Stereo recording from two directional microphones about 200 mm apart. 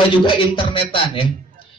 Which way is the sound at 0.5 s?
25° left (ahead or behind).